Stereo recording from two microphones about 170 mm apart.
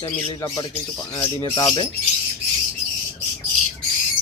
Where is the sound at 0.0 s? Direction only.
25° left (ahead or behind).